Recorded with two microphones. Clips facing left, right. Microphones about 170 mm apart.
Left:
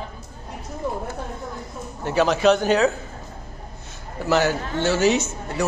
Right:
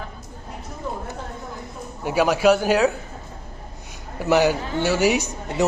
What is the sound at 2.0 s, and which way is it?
Speech, 10° right (ahead or behind).